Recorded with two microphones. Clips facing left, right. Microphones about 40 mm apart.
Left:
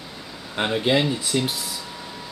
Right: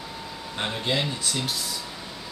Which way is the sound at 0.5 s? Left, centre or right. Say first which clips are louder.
Left 6 dB; centre.